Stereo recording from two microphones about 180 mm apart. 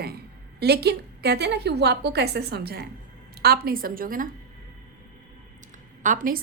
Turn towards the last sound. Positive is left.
turn(degrees=-45)  # may be behind; listen again after turning